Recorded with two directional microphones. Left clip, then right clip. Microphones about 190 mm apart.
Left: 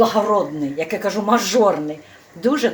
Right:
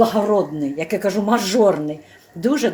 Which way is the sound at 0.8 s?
45° right (ahead or behind).